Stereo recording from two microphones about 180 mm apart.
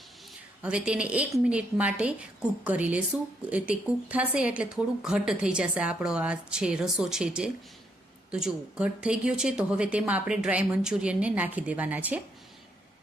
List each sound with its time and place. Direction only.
0.6 s a woman's voice: 5° right (ahead or behind)